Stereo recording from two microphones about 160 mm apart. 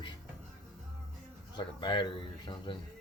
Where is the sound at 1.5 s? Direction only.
30° left (ahead or behind).